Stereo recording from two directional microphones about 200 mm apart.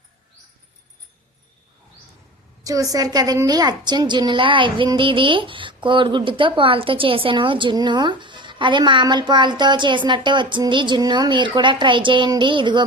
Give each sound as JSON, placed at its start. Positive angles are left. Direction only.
{"t": 2.9, "sound": "a woman's voice", "side_deg": -20}